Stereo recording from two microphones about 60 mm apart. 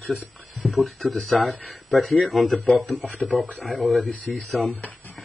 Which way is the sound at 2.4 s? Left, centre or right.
Centre.